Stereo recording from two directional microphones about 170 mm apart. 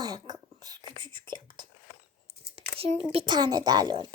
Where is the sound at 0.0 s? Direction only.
20° right (ahead or behind).